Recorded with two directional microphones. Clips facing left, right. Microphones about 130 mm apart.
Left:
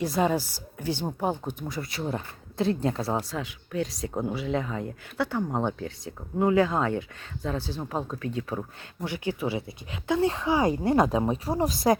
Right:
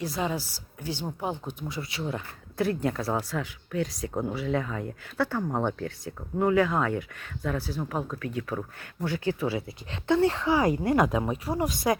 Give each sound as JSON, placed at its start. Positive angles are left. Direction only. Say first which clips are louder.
{"t": 0.0, "sound": "speech", "louder": "left 5 dB", "side_deg": 55}
{"t": 2.6, "sound": "speech", "louder": "left 1 dB", "side_deg": 25}
{"t": 4.1, "sound": "speech", "louder": "left 1 dB", "side_deg": 5}
{"t": 4.4, "sound": "speech", "louder": "even", "side_deg": 20}